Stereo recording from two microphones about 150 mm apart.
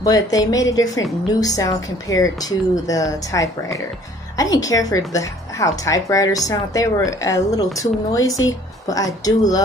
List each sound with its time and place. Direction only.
0.0 s speech: 25° left (ahead or behind)